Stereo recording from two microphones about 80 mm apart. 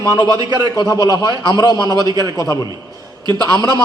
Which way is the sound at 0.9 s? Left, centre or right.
Left.